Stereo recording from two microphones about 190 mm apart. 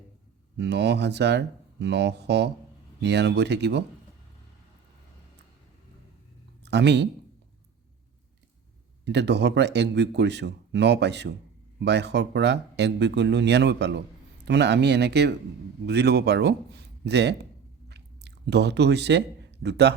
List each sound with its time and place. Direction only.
0.5 s speech: 65° right (ahead or behind)
6.7 s speech: 65° right (ahead or behind)
9.0 s speech: 65° right (ahead or behind)
17.8 s chewing: 60° right (ahead or behind)